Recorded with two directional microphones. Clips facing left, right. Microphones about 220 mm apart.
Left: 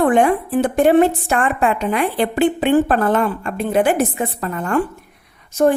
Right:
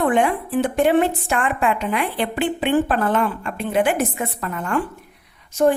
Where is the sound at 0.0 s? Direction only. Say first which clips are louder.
Left 4 dB; 45° left (ahead or behind).